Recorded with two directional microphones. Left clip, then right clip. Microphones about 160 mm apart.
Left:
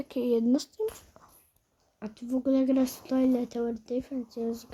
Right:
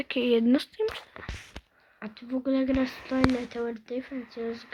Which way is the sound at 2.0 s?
65° left (ahead or behind).